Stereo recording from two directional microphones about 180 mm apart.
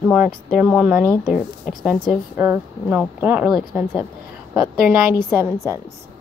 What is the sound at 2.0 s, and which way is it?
A woman's voice, 10° right (ahead or behind).